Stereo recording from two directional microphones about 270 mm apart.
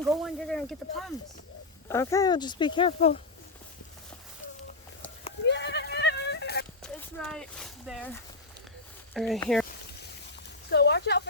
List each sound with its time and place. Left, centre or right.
0.1 s speech: centre; by 3.2 s left
5.5 s goat: left
6.8 s speech: centre
9.1 s speech: centre
10.7 s speech: left